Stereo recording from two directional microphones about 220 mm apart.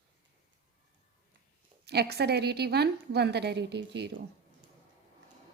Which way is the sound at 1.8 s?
45° right (ahead or behind).